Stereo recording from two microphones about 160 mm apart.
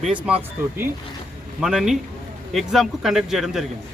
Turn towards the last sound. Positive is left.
turn(degrees=0)  # may be behind; listen again after turning